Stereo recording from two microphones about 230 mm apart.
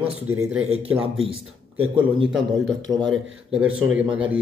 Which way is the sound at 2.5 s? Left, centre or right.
Centre.